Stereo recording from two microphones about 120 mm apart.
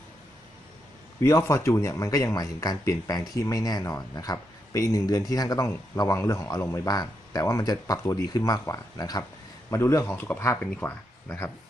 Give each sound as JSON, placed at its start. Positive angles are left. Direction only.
{"t": 1.2, "sound": "speech", "side_deg": 25}